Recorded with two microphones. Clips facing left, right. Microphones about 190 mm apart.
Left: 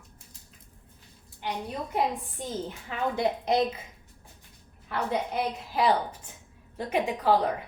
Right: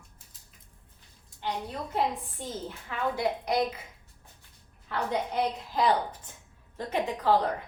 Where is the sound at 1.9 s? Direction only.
15° left (ahead or behind).